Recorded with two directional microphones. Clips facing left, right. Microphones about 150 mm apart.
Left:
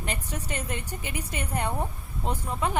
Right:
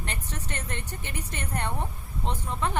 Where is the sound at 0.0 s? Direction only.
10° left (ahead or behind).